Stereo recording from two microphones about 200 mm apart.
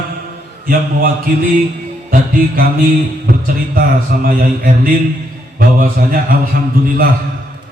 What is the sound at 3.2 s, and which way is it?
A man's voice, 45° right (ahead or behind).